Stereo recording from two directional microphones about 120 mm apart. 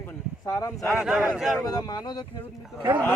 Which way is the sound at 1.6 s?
30° left (ahead or behind).